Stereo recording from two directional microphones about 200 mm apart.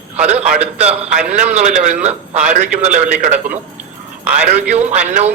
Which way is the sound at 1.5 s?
35° right (ahead or behind).